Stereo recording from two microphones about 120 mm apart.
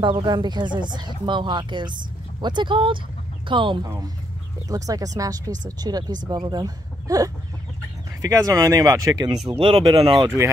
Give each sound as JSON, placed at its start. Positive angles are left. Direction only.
{"t": 0.0, "sound": "speech", "side_deg": -40}
{"t": 4.6, "sound": "speech", "side_deg": -30}
{"t": 9.6, "sound": "speech", "side_deg": -55}
{"t": 9.8, "sound": "speech", "side_deg": -40}